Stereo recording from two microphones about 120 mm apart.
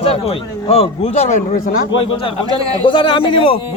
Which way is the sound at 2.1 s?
50° left (ahead or behind).